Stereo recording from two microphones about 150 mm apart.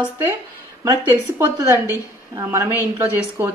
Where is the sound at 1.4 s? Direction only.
20° right (ahead or behind).